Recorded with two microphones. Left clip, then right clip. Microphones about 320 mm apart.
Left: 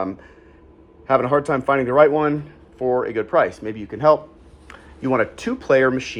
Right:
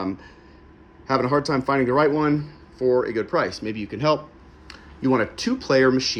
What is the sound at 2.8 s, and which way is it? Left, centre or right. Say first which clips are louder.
Speech: even; centre.